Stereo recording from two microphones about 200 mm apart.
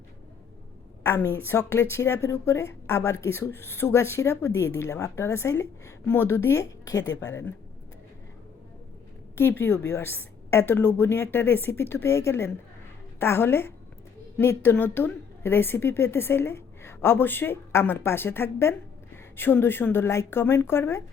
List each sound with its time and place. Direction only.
1.0 s a woman's voice: 10° left (ahead or behind)
9.6 s a woman's voice: 10° left (ahead or behind)